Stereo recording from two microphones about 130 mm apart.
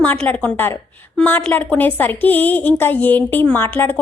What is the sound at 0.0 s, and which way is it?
A woman's voice, 10° left (ahead or behind).